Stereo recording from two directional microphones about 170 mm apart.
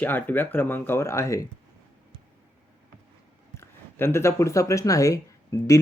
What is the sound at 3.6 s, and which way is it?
Speech, 15° left (ahead or behind).